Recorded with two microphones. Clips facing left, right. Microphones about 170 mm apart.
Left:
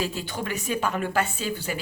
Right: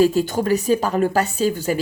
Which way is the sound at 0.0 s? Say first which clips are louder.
Right 13 dB; 45° right (ahead or behind).